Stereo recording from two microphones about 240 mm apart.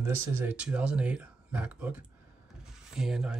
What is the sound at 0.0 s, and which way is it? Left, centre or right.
Speech, centre.